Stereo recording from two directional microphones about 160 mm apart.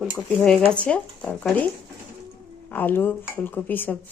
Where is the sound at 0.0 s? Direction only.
Centre (ahead or behind).